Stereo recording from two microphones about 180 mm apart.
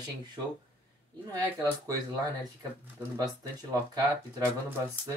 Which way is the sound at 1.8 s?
20° right (ahead or behind).